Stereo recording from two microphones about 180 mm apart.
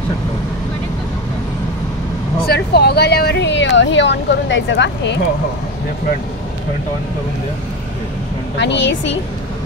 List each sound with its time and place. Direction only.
2.4 s speech: 60° left (ahead or behind); by 5.2 s 80° left
8.5 s a woman's voice: 75° left (ahead or behind)